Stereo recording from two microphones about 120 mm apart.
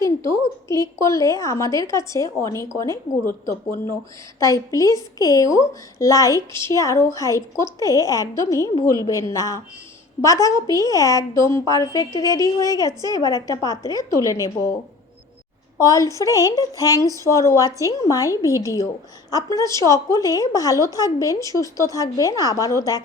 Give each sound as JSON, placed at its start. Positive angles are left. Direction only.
{"t": 0.0, "sound": "a woman's voice", "side_deg": 25}
{"t": 4.4, "sound": "a woman's voice", "side_deg": 25}
{"t": 15.8, "sound": "a woman's voice", "side_deg": 30}